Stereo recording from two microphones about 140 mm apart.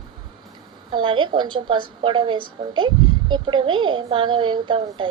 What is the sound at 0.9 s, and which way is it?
A woman's voice, 35° right (ahead or behind).